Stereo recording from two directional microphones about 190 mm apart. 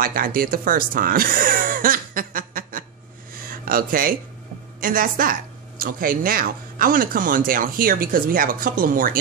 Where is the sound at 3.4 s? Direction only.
50° right (ahead or behind).